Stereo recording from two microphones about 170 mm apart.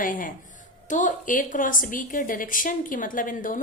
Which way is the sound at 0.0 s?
55° left (ahead or behind).